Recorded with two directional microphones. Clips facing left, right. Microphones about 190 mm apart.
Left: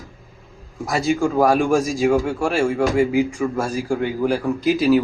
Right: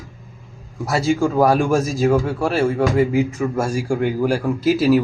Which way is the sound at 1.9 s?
Centre (ahead or behind).